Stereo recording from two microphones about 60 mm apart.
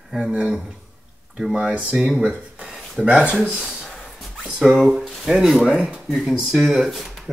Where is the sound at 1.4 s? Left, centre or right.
Centre.